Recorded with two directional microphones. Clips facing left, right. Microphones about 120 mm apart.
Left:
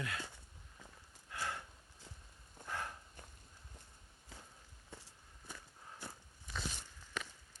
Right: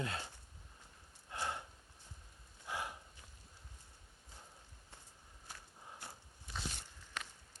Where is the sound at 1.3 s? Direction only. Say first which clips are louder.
Right 1 dB; 20° right (ahead or behind).